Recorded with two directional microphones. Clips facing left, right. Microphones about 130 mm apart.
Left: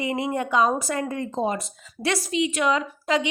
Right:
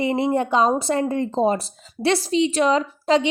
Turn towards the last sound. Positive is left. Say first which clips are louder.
# right 5 dB
turn(degrees=-30)  # may be behind; listen again after turning